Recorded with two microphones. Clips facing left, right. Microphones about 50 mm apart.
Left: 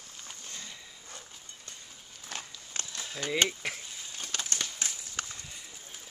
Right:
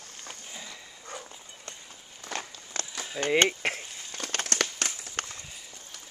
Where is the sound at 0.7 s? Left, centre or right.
Right.